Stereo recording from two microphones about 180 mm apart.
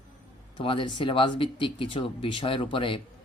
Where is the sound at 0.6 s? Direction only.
30° left (ahead or behind).